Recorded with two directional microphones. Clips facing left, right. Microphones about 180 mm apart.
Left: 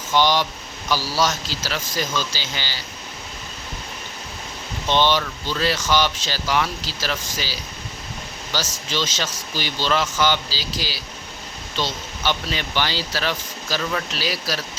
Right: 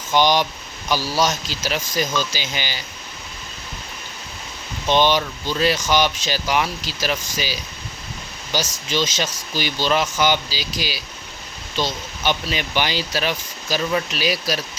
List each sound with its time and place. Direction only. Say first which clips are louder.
0.1 s speech: right 2 dB; 15° right (ahead or behind)
4.9 s speech: right 2 dB; 15° right (ahead or behind)